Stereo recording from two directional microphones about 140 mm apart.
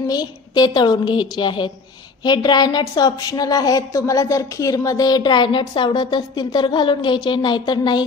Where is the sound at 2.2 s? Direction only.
30° left (ahead or behind).